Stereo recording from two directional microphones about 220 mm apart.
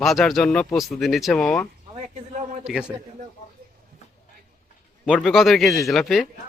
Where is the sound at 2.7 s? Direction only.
5° right (ahead or behind).